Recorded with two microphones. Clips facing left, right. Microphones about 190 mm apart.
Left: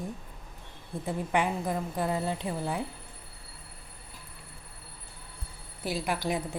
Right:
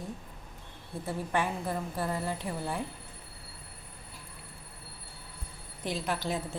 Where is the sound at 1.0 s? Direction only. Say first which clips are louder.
Left 3 dB; 15° left (ahead or behind).